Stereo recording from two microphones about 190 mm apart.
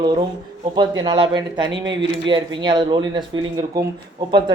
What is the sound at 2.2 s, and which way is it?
Speech, 25° right (ahead or behind).